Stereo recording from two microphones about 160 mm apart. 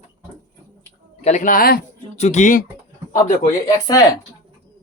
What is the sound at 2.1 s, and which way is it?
Speech, 45° left (ahead or behind).